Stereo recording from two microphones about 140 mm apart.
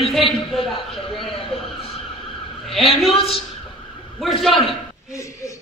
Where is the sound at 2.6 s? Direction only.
Centre (ahead or behind).